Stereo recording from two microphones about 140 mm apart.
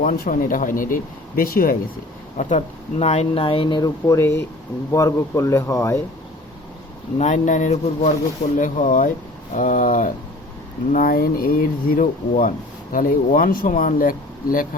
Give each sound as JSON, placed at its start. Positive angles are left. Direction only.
{"t": 0.0, "sound": "speech", "side_deg": 85}
{"t": 2.4, "sound": "speech", "side_deg": 50}
{"t": 7.2, "sound": "speech", "side_deg": 60}
{"t": 10.9, "sound": "speech", "side_deg": 85}